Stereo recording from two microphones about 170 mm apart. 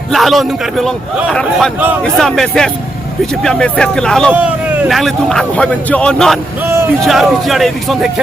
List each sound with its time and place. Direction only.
0.1 s speech: centre (ahead or behind)
6.6 s a sound: 15° right (ahead or behind)
7.0 s speech: centre (ahead or behind)